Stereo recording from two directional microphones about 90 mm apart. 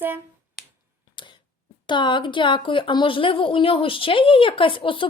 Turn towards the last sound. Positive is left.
turn(degrees=70)  # may be behind; listen again after turning